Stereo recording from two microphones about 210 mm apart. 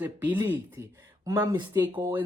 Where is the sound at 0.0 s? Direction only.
10° right (ahead or behind).